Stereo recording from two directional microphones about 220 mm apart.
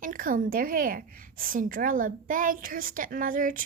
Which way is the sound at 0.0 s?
40° right (ahead or behind).